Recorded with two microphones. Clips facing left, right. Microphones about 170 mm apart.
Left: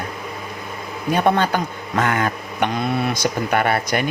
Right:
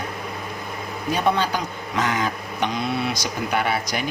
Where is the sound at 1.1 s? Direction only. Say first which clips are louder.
Left 4 dB; 55° left (ahead or behind).